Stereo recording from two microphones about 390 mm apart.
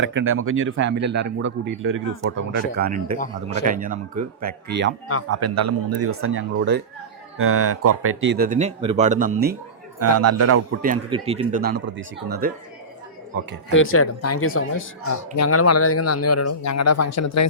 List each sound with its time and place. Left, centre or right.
0.0 s speech: right
5.3 s speech: right
10.0 s speech: right
10.8 s speech: centre
13.7 s speech: left